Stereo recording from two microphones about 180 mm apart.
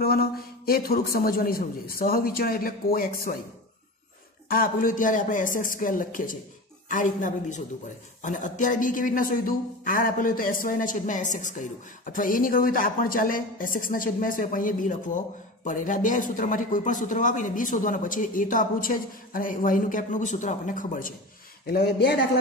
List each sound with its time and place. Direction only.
0.0 s a man's voice: 55° left (ahead or behind)
4.5 s a woman's voice: 50° left (ahead or behind)
21.6 s a man's voice: 60° left (ahead or behind)